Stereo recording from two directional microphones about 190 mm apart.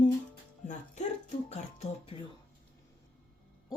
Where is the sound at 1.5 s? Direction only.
35° left (ahead or behind).